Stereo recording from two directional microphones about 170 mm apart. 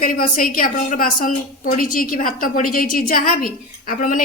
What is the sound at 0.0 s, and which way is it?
A woman's voice, 55° left (ahead or behind).